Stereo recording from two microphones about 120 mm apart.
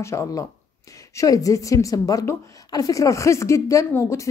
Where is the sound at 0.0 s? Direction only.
25° left (ahead or behind).